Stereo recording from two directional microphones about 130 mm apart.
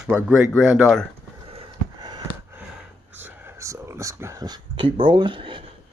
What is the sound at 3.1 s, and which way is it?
Whispering, 20° right (ahead or behind).